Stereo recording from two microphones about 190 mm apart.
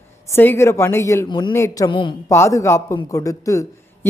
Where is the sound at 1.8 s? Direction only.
25° left (ahead or behind).